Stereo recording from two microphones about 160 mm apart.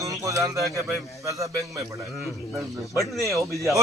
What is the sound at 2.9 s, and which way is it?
Speech, 20° right (ahead or behind).